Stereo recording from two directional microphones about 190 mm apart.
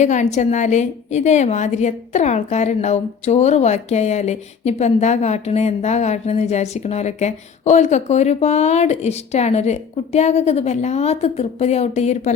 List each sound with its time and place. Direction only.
0.0 s a woman's voice: 40° left (ahead or behind)